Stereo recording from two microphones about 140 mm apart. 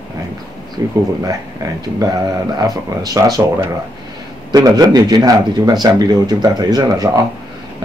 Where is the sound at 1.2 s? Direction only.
25° right (ahead or behind).